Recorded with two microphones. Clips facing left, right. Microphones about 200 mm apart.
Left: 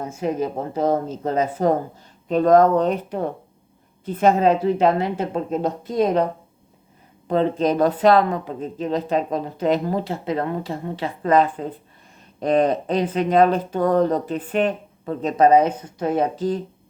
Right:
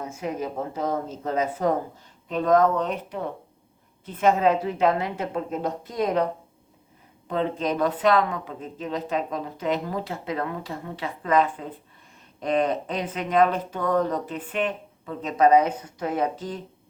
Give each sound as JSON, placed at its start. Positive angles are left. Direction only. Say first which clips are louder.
{"t": 0.0, "sound": "speech", "louder": "left 6 dB", "side_deg": 30}
{"t": 7.3, "sound": "speech", "louder": "left 6 dB", "side_deg": 35}